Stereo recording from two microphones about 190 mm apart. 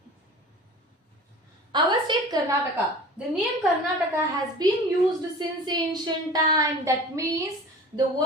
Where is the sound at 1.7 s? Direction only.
20° right (ahead or behind).